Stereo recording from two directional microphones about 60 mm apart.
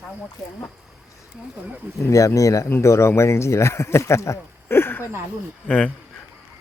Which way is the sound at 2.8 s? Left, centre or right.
Left.